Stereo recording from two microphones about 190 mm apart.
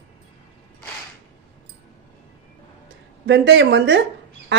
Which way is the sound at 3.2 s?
65° right (ahead or behind).